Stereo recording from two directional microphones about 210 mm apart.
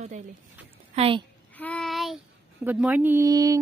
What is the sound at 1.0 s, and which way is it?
Speech, 25° right (ahead or behind).